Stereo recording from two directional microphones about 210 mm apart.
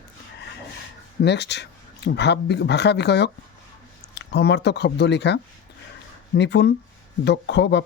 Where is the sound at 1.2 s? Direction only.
55° left (ahead or behind).